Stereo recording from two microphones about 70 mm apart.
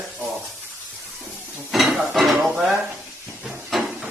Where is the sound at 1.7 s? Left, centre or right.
Centre.